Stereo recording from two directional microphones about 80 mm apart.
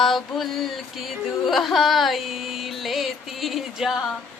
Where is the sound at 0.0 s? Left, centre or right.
Centre.